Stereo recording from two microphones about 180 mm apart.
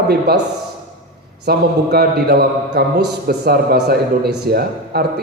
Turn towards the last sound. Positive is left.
turn(degrees=-60)  # may be behind; listen again after turning